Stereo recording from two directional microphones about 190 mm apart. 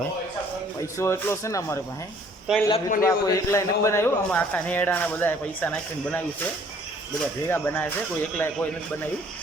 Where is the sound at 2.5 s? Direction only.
5° right (ahead or behind).